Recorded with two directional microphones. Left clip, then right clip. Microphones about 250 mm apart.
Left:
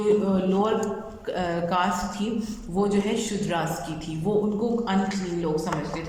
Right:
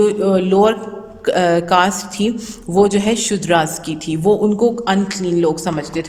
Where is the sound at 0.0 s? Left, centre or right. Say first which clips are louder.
Right 8 dB; right.